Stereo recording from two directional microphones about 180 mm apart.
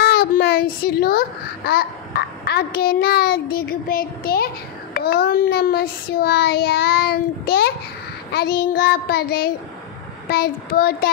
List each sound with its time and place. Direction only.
0.0 s a child's voice: 60° left (ahead or behind)